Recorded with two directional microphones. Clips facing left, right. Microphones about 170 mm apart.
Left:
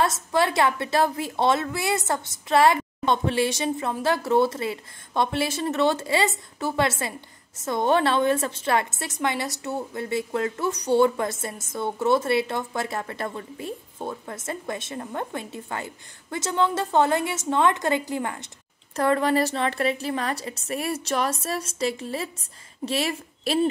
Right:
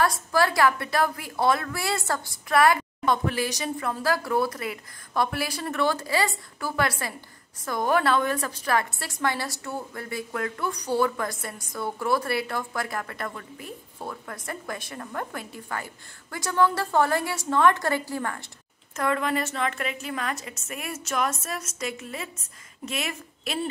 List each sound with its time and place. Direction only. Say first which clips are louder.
0.0 s a woman's voice: left 1 dB; 25° left (ahead or behind)
18.9 s a woman's voice: left 5 dB; 35° left (ahead or behind)